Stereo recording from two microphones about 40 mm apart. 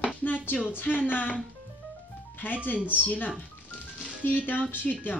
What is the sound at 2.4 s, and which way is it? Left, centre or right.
Speech, left.